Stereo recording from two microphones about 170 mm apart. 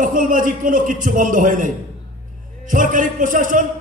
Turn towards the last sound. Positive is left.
turn(degrees=-50)  # may be behind; listen again after turning